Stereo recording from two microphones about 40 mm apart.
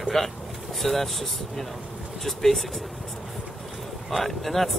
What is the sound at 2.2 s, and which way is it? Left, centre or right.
Speech, centre.